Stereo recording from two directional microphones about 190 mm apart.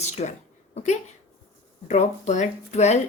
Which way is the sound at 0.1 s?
35° left (ahead or behind).